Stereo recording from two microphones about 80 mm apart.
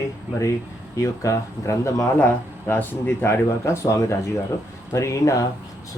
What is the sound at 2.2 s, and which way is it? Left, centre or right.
A man's voice, left.